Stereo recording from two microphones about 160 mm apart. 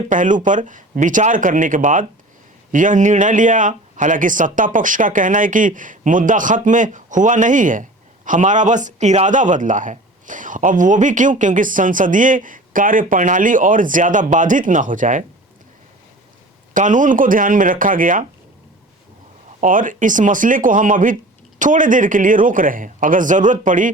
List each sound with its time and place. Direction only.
0.1 s speech: 55° right (ahead or behind)
16.7 s a man's voice: 55° right (ahead or behind)
19.5 s a man's voice: 55° right (ahead or behind)